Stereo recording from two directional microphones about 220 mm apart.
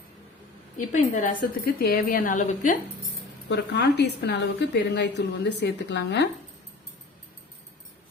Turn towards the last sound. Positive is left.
turn(degrees=50)  # may be behind; listen again after turning